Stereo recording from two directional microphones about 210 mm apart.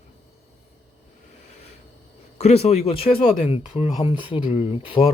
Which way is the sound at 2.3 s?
30° left (ahead or behind).